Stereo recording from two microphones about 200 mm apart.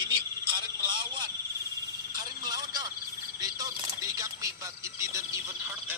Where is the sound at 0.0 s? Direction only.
25° right (ahead or behind).